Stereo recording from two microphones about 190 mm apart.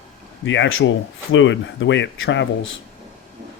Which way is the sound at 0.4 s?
80° left.